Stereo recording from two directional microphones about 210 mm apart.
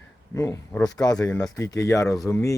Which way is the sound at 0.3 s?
15° left (ahead or behind).